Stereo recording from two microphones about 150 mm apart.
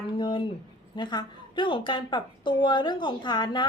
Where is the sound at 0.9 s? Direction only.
30° left (ahead or behind).